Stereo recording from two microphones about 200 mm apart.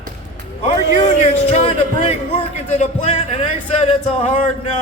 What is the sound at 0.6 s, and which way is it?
A man's voice, 35° left (ahead or behind).